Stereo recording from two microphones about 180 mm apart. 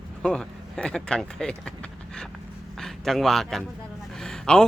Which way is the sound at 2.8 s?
Centre (ahead or behind).